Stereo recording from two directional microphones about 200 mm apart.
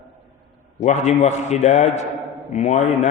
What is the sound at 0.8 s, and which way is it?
A man's voice, 35° left (ahead or behind).